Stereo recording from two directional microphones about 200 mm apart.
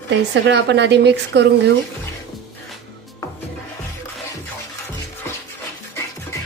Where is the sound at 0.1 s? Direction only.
60° right (ahead or behind).